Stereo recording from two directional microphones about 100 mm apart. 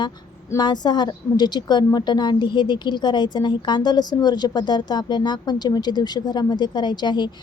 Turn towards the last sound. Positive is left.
turn(degrees=45)  # may be behind; listen again after turning